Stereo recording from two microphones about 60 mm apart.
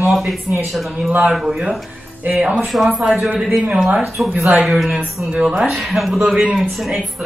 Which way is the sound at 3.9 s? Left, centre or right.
Centre.